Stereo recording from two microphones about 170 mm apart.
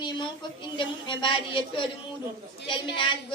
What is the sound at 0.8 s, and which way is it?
A woman's voice, 30° left (ahead or behind).